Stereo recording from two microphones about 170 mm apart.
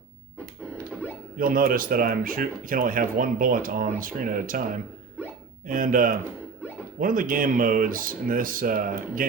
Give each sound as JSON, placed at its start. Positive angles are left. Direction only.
{"t": 1.4, "sound": "a man's voice", "side_deg": -55}